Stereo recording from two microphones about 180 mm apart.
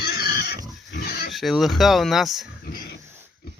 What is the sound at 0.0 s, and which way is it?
Pig, 60° left (ahead or behind).